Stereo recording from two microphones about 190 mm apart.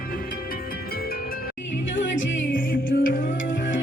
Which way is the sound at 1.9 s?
80° left.